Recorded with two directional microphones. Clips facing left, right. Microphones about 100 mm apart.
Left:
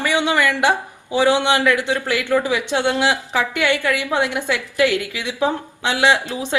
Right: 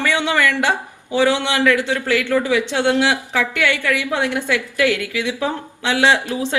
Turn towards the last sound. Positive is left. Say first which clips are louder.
# right 1 dB
turn(degrees=20)  # may be behind; listen again after turning